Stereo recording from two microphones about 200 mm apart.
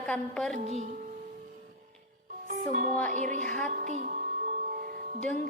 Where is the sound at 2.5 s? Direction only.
40° right (ahead or behind).